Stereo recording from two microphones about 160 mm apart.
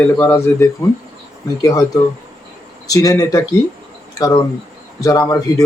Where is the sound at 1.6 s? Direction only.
20° left (ahead or behind).